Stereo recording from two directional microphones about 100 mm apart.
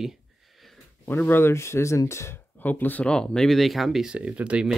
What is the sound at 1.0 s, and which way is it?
Speech, 20° left (ahead or behind).